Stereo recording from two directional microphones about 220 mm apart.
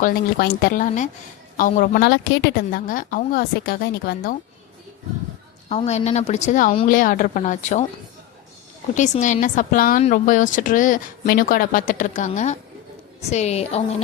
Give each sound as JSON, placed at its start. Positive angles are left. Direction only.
{"t": 0.0, "sound": "speech", "side_deg": 45}
{"t": 5.6, "sound": "speech", "side_deg": 30}
{"t": 9.0, "sound": "a woman's voice", "side_deg": 35}